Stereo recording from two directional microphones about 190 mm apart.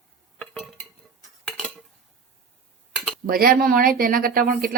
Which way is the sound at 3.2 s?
50° right (ahead or behind).